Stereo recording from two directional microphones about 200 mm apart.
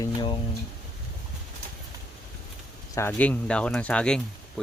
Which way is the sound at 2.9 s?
10° left (ahead or behind).